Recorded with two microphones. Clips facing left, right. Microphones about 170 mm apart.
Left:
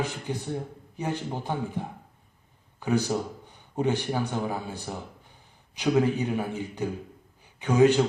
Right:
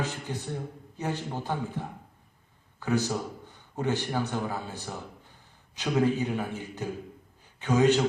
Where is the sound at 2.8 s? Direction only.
15° left (ahead or behind).